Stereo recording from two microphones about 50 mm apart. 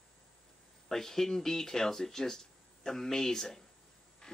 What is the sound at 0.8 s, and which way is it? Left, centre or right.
Speech, centre.